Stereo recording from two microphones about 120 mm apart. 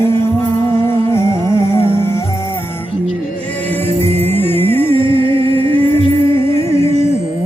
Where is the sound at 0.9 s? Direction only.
20° left (ahead or behind).